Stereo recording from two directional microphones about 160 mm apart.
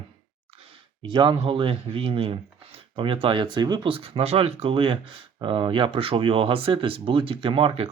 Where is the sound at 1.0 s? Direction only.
30° right (ahead or behind).